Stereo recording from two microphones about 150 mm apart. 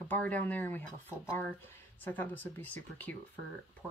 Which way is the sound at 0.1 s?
10° left (ahead or behind).